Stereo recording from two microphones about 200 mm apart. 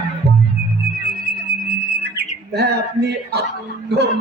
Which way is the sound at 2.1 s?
55° right (ahead or behind).